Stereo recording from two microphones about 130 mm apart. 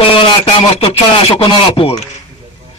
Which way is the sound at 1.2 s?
45° left (ahead or behind).